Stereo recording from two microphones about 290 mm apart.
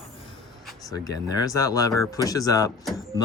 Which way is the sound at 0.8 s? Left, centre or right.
Centre.